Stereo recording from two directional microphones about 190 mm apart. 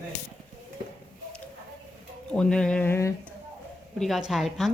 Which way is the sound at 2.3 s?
5° left (ahead or behind).